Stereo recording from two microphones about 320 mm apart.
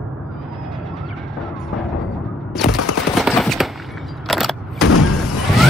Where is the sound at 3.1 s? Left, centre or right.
Centre.